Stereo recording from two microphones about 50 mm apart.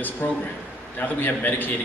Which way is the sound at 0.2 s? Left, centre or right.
Left.